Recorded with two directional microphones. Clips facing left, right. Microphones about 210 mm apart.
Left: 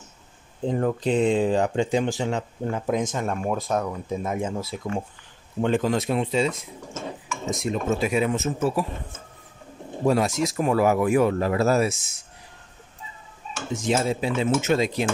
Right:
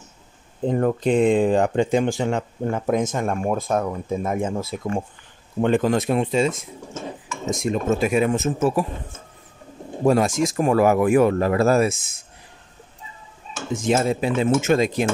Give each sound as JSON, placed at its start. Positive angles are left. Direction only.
{"t": 0.7, "sound": "speech", "side_deg": -50}
{"t": 10.0, "sound": "speech", "side_deg": -50}
{"t": 13.8, "sound": "speech", "side_deg": -55}